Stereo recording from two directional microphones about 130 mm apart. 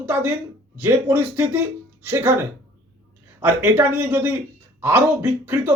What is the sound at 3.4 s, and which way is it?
Speech, 15° right (ahead or behind).